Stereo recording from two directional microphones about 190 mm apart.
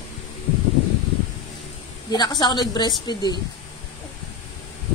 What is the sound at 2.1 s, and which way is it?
Speech, 20° left (ahead or behind).